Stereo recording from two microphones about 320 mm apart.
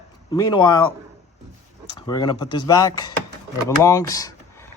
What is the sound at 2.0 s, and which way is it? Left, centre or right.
Speech, centre.